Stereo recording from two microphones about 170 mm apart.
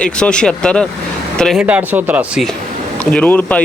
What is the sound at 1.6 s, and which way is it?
Speech, 10° right (ahead or behind).